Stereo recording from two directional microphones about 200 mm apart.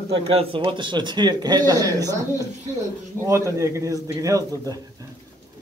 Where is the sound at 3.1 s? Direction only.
15° right (ahead or behind).